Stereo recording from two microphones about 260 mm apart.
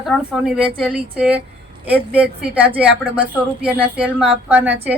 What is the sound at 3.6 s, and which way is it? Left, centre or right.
Speech, centre.